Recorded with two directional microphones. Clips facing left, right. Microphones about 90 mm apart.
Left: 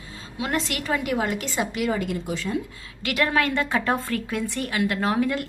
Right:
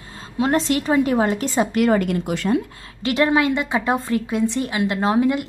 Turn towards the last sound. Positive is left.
turn(degrees=-20)  # may be behind; listen again after turning